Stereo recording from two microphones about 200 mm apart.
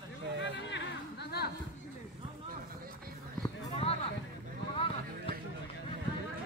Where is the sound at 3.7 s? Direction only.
30° left (ahead or behind).